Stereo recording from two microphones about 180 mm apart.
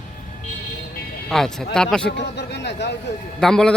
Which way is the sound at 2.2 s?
70° left (ahead or behind).